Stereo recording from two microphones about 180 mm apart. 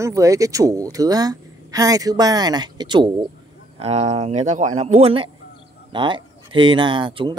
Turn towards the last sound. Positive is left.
turn(degrees=-30)  # may be behind; listen again after turning